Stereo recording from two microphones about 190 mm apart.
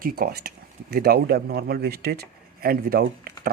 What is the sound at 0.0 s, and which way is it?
Speech, 50° right (ahead or behind).